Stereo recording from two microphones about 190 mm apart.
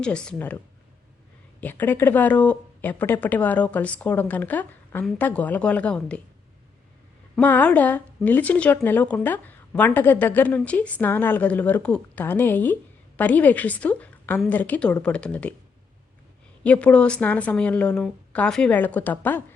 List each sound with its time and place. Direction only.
0.0 s speech: 5° left (ahead or behind)
1.6 s speech: 10° left (ahead or behind)
7.3 s speech: 10° left (ahead or behind)
16.6 s speech: 5° left (ahead or behind)